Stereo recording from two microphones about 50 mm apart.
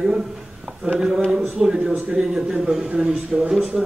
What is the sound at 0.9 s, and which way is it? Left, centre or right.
A man's voice, centre.